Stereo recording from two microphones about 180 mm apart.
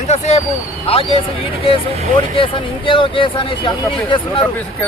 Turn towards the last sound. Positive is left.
turn(degrees=30)  # may be behind; listen again after turning